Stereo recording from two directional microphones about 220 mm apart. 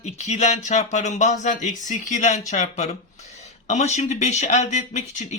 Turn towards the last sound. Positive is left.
turn(degrees=30)  # may be behind; listen again after turning